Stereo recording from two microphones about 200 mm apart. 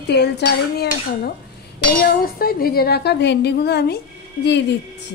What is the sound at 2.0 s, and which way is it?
A woman's voice, 45° left (ahead or behind).